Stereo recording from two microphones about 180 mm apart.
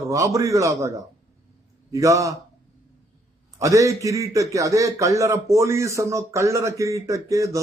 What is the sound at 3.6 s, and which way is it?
A man's voice, 15° right (ahead or behind).